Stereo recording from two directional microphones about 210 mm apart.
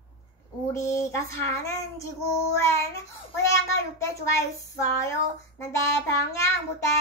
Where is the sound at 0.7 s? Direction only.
15° left (ahead or behind).